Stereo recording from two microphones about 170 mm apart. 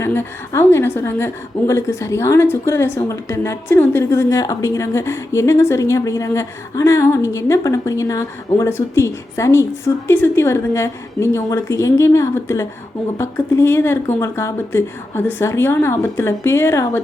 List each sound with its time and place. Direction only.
0.0 s a woman's voice: 15° left (ahead or behind)